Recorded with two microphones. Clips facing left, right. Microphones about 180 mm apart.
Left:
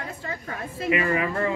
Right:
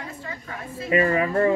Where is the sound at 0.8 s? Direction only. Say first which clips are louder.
Right 3 dB; 35° right (ahead or behind).